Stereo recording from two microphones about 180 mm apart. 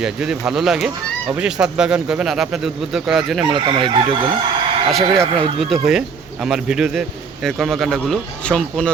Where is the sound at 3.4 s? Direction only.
25° right (ahead or behind).